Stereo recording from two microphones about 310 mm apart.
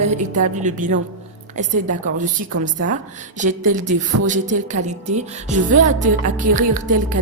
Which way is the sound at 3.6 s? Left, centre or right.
Right.